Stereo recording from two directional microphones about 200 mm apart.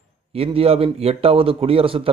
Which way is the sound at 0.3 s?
30° right (ahead or behind).